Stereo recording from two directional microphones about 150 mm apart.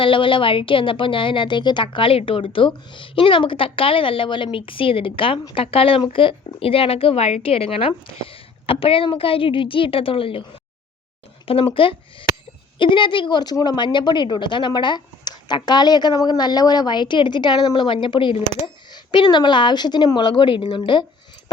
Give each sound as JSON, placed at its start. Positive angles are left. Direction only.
{"t": 0.0, "sound": "speech", "side_deg": 35}
{"t": 11.4, "sound": "speech", "side_deg": 40}